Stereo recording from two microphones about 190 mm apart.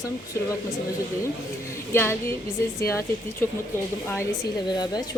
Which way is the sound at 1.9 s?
10° left (ahead or behind).